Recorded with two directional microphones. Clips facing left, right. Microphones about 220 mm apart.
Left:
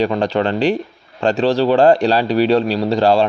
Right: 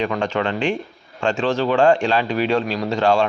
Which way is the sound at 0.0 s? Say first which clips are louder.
Left 5 dB; 35° left (ahead or behind).